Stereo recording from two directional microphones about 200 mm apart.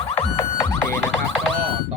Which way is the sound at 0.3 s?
15° left (ahead or behind).